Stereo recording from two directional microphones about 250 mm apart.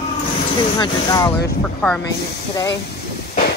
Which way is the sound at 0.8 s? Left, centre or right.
Centre.